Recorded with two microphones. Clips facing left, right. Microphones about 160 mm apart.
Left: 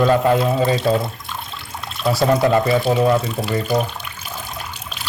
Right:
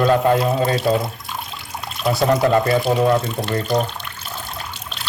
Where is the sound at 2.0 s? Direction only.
Centre (ahead or behind).